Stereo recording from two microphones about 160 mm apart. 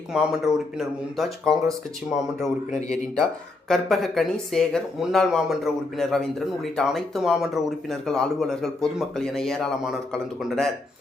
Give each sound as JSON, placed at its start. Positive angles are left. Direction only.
{"t": 0.1, "sound": "speech", "side_deg": -5}
{"t": 3.7, "sound": "speech", "side_deg": 0}